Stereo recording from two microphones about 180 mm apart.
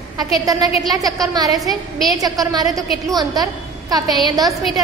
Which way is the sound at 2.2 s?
20° right (ahead or behind).